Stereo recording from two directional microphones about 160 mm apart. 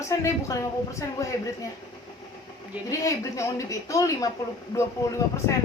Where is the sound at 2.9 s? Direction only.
20° left (ahead or behind).